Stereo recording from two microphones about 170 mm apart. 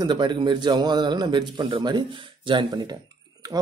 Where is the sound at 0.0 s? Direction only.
25° right (ahead or behind).